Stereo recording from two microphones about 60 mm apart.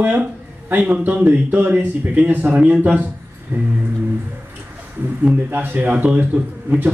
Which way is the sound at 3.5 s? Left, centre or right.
Right.